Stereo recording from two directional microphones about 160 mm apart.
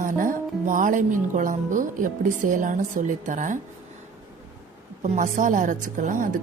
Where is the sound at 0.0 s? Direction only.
55° right (ahead or behind).